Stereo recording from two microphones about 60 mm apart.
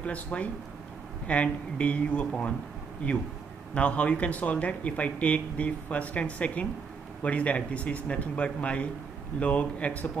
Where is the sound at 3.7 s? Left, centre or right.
Left.